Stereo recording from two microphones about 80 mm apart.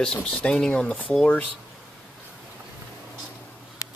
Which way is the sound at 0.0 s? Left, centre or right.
Centre.